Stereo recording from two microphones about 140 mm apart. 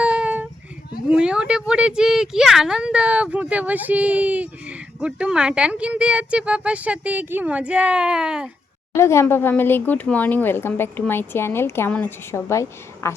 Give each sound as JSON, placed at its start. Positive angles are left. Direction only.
{"t": 0.0, "sound": "a sound", "side_deg": -10}
{"t": 1.0, "sound": "speech", "side_deg": -5}
{"t": 9.0, "sound": "a woman's voice", "side_deg": 20}